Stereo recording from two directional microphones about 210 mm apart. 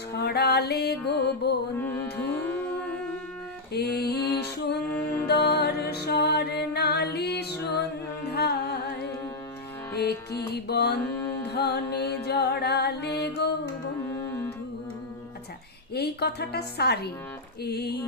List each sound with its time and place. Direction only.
0.2 s music: 50° left (ahead or behind)
2.4 s music: 10° left (ahead or behind)
3.7 s music: 50° left (ahead or behind)
14.2 s music: 15° left (ahead or behind)
16.0 s music: 50° left (ahead or behind)